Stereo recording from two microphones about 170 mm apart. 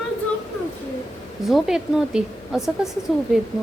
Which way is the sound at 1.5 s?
Centre (ahead or behind).